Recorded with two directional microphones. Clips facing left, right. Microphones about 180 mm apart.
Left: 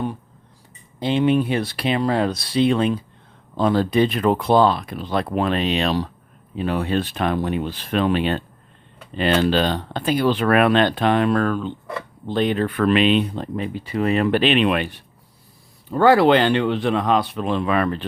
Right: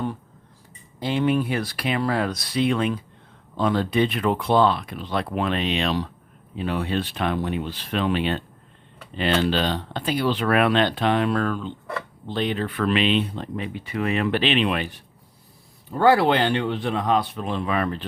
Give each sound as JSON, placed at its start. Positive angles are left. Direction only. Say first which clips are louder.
{"t": 0.9, "sound": "speech", "louder": "left 4 dB", "side_deg": 20}
{"t": 16.0, "sound": "speech", "louder": "left 4 dB", "side_deg": 85}